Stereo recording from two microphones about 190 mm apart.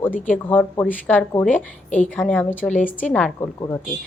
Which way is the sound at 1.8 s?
40° left (ahead or behind).